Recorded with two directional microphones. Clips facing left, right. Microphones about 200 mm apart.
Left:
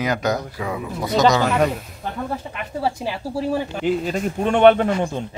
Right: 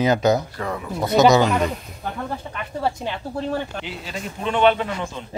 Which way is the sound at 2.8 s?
5° left (ahead or behind).